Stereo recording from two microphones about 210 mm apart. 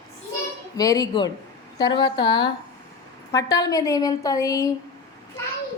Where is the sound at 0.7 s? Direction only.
15° left (ahead or behind).